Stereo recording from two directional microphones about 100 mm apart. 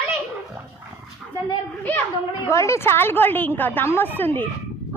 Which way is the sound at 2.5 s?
30° left (ahead or behind).